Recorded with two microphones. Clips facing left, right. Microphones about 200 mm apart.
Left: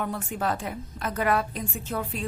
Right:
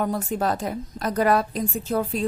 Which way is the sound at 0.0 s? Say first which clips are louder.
Right 5 dB; 40° right (ahead or behind).